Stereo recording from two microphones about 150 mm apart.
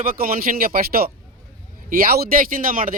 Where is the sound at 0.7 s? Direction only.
90° right.